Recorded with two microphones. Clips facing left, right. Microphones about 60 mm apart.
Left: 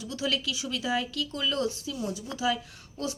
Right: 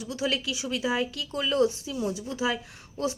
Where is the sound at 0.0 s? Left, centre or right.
Centre.